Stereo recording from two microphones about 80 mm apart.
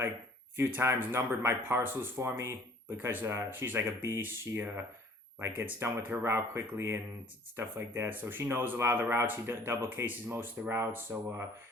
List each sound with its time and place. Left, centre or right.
0.5 s speech: right
4.2 s speech: right